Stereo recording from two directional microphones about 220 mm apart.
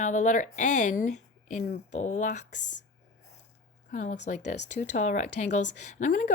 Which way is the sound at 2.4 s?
90° left.